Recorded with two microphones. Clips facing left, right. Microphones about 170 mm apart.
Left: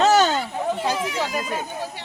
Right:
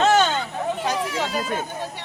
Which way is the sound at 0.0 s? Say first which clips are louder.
Left 1 dB; 40° left (ahead or behind).